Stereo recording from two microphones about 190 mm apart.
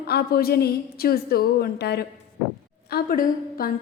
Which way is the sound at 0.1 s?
55° left (ahead or behind).